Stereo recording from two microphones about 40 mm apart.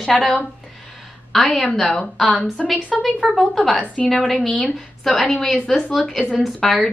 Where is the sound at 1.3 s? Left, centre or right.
Centre.